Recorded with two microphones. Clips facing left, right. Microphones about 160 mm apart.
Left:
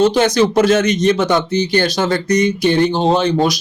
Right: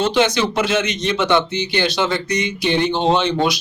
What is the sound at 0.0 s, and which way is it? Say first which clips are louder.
Speech: left 5 dB; 40° left (ahead or behind).